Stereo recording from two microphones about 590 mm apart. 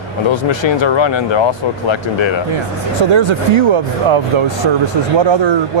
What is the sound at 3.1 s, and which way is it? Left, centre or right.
Speech, right.